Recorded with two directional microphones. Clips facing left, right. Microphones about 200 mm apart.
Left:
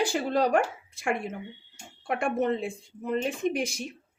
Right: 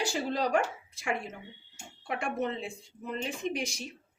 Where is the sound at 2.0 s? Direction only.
50° left (ahead or behind).